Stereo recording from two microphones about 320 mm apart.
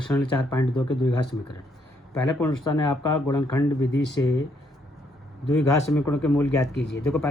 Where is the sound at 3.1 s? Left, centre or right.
Centre.